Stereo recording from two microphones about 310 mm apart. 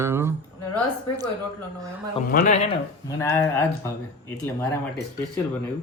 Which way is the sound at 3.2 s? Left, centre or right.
Centre.